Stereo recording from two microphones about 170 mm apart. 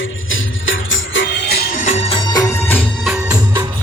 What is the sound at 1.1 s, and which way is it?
Music, 85° left.